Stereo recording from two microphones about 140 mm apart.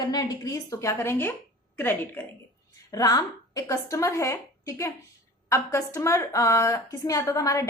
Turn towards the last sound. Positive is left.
turn(degrees=20)  # may be behind; listen again after turning